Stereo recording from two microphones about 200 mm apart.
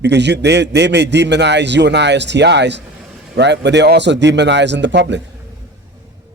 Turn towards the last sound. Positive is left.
turn(degrees=-60)  # may be behind; listen again after turning